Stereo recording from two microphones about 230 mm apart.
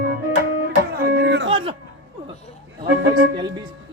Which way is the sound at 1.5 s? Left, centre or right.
Right.